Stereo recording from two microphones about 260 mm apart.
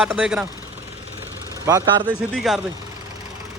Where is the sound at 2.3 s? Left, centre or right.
Centre.